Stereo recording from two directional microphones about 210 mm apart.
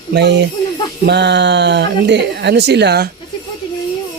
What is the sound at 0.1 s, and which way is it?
Speech, 55° right (ahead or behind).